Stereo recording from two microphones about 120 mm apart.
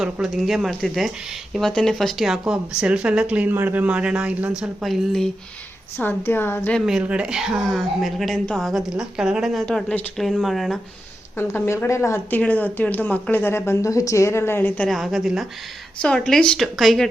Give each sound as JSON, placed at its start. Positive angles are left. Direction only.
{"t": 0.0, "sound": "a woman's voice", "side_deg": 0}
{"t": 6.0, "sound": "a woman's voice", "side_deg": 15}
{"t": 6.7, "sound": "a woman's voice", "side_deg": -5}
{"t": 11.3, "sound": "speech", "side_deg": 20}
{"t": 14.8, "sound": "a woman's voice", "side_deg": 0}